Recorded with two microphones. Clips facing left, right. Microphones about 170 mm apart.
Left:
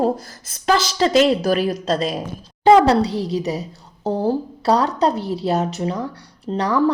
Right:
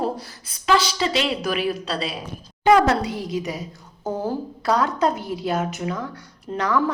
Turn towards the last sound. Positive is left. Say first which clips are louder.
# left 2 dB
turn(degrees=35)  # may be behind; listen again after turning